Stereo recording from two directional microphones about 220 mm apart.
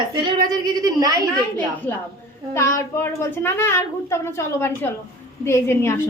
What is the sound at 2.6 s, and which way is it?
A woman's voice, 10° left (ahead or behind).